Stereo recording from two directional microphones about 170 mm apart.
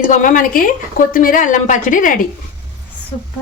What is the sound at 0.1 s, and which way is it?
A woman's voice, 50° left (ahead or behind).